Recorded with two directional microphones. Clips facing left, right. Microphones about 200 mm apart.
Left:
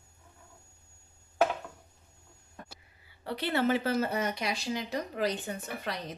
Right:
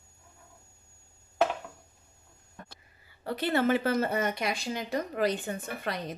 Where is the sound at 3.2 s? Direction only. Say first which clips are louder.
Right 2 dB; 45° right (ahead or behind).